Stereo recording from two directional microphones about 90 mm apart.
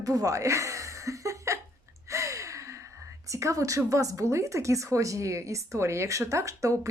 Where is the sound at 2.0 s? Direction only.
35° right (ahead or behind).